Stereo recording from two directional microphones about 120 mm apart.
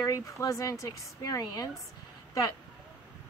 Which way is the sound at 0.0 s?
30° left (ahead or behind).